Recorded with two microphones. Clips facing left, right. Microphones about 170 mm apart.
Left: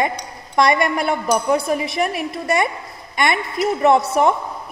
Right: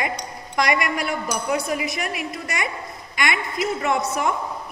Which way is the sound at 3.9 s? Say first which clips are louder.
Left 10 dB; 60° left (ahead or behind).